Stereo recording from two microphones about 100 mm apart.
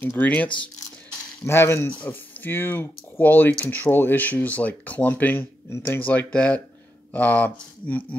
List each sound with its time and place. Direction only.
0.0 s speech: 20° left (ahead or behind)